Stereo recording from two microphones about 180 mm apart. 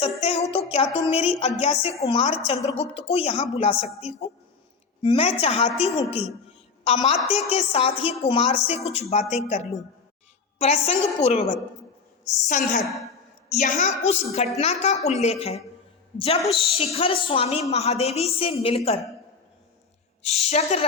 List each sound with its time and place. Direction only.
0.0 s a sound: 35° left (ahead or behind)
1.6 s a woman's voice: 35° left (ahead or behind)
12.2 s a woman's voice: 45° left (ahead or behind)
20.2 s a woman's voice: 35° left (ahead or behind)